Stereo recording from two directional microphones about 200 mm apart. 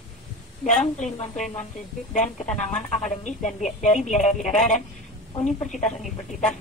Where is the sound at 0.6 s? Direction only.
40° left (ahead or behind).